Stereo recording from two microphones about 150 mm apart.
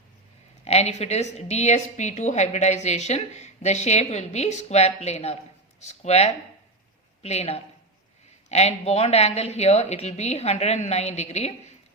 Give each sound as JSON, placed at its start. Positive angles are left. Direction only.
{"t": 0.6, "sound": "a woman's voice", "side_deg": 45}